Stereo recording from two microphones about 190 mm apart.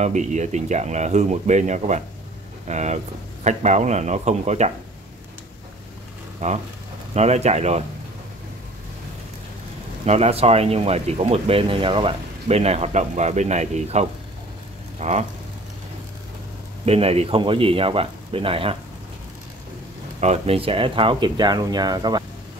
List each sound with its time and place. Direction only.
0.0 s speech: 40° right (ahead or behind)
6.4 s speech: 35° right (ahead or behind)
10.0 s speech: 35° right (ahead or behind)
16.8 s speech: 30° right (ahead or behind)
20.2 s speech: 35° right (ahead or behind)